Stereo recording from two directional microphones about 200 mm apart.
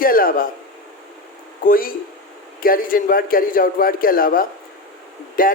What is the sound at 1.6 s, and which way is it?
Speech, 45° left (ahead or behind).